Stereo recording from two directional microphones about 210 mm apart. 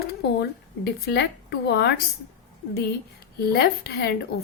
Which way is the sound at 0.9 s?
55° left (ahead or behind).